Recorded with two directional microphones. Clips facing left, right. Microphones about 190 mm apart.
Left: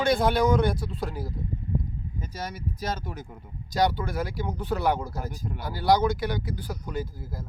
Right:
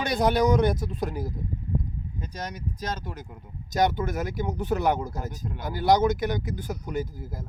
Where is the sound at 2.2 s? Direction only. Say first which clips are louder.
Even; 5° left (ahead or behind).